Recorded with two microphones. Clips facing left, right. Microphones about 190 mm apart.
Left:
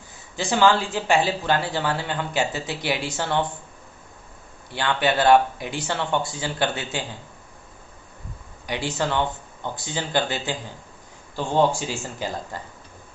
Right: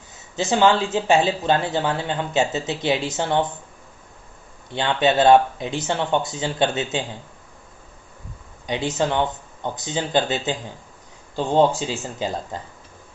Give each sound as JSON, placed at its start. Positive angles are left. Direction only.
{"t": 0.3, "sound": "speech", "side_deg": -20}
{"t": 4.7, "sound": "speech", "side_deg": -20}
{"t": 8.6, "sound": "speech", "side_deg": -20}